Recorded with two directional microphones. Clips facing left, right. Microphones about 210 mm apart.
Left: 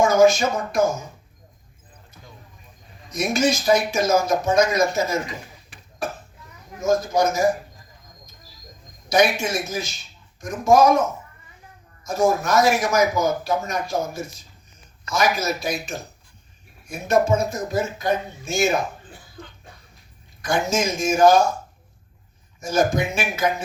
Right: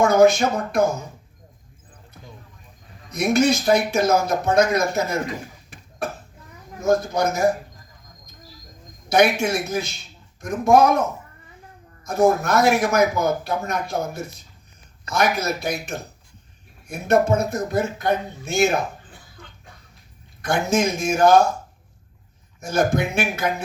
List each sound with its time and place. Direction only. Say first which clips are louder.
0.0 s a sound: right 1 dB; 60° right (ahead or behind)
3.1 s speech: right 3 dB; 60° right (ahead or behind)
9.0 s speech: right 2 dB; 60° right (ahead or behind)
12.0 s speech: right 2 dB; 60° right (ahead or behind)
20.4 s speech: right 2 dB; 60° right (ahead or behind)
22.6 s speech: even; 60° right (ahead or behind)